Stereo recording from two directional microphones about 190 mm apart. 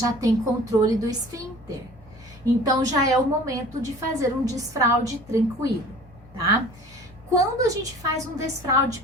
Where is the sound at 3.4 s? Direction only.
15° right (ahead or behind).